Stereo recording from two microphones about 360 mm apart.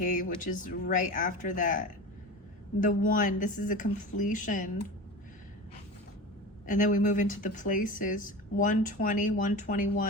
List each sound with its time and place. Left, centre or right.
0.0 s speech: left
6.7 s speech: left